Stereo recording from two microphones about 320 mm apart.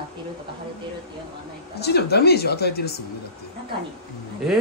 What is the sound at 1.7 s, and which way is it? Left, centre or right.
Speech, left.